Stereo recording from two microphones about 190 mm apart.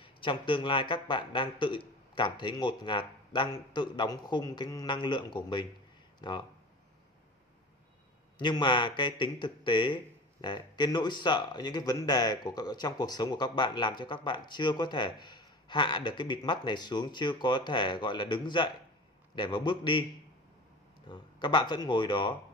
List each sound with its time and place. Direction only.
0.0 s speech: 25° left (ahead or behind)
8.4 s speech: 25° left (ahead or behind)
21.1 s speech: 25° left (ahead or behind)